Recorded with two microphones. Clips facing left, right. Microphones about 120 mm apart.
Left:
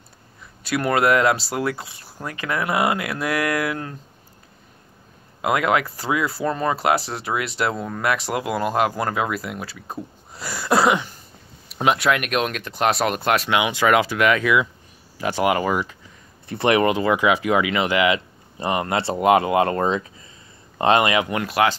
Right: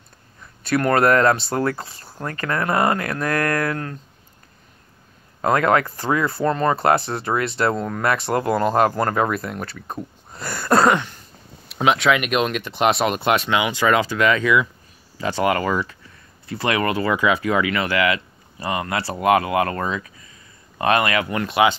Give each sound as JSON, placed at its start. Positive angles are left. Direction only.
{"t": 0.7, "sound": "speech", "side_deg": 10}
{"t": 5.4, "sound": "speech", "side_deg": 10}
{"t": 9.9, "sound": "a sound", "side_deg": 5}
{"t": 11.7, "sound": "speech", "side_deg": 0}
{"t": 13.6, "sound": "speech", "side_deg": 15}
{"t": 16.4, "sound": "speech", "side_deg": 25}
{"t": 21.5, "sound": "speech", "side_deg": 0}